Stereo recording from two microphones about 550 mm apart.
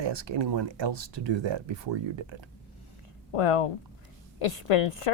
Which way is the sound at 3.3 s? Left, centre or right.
Left.